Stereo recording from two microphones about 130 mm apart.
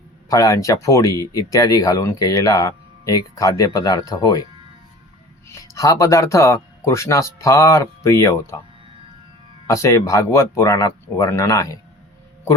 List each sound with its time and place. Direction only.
0.3 s speech: 25° left (ahead or behind)
5.5 s speech: 25° left (ahead or behind)
9.6 s speech: 25° left (ahead or behind)